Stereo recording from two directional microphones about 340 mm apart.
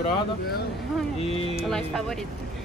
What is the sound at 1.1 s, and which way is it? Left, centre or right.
Speech, centre.